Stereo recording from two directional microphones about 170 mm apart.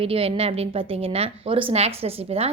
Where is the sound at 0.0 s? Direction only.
35° right (ahead or behind).